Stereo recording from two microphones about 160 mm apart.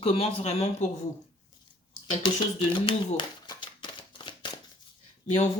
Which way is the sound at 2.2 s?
30° left (ahead or behind).